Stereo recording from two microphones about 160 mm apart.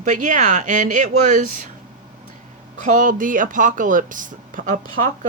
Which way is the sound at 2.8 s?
55° right (ahead or behind).